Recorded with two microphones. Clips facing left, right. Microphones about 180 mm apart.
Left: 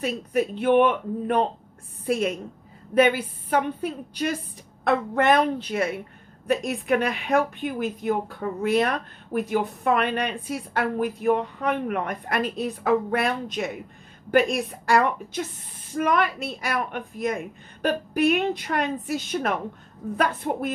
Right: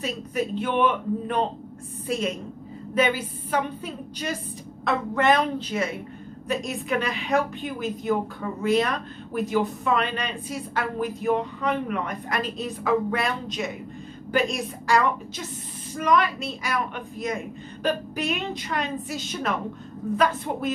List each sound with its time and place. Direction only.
0.0 s a woman's voice: 55° left (ahead or behind)